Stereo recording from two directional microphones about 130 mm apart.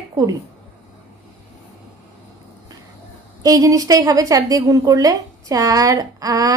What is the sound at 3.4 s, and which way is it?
A woman's voice, 25° right (ahead or behind).